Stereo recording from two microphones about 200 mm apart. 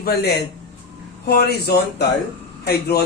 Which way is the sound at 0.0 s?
50° left (ahead or behind).